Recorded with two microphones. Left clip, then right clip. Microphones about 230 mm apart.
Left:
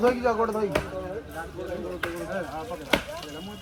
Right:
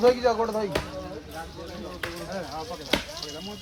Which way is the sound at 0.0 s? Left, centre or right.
Right.